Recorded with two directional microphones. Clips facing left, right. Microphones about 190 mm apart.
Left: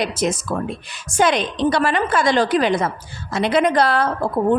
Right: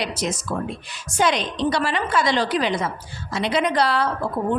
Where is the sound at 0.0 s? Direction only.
50° left (ahead or behind).